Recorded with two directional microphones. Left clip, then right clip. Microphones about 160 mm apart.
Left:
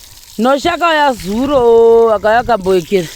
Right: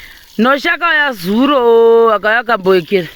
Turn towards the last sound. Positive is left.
turn(degrees=30)  # may be behind; listen again after turning